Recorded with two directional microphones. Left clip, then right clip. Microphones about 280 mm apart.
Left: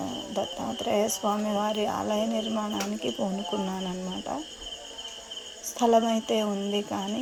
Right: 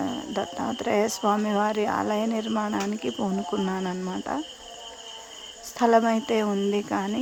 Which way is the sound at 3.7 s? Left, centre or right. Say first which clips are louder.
Right 4 dB; centre.